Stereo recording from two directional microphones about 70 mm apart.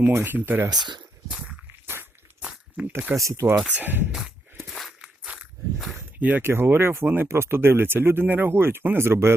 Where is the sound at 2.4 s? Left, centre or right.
Centre.